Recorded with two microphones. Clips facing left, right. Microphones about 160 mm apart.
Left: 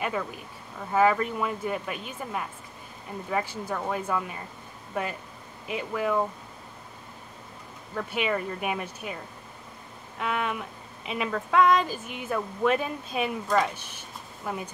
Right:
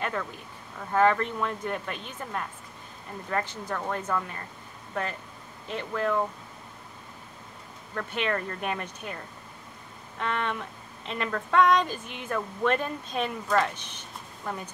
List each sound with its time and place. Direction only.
0.0 s speech: 10° left (ahead or behind)
7.9 s speech: 5° left (ahead or behind)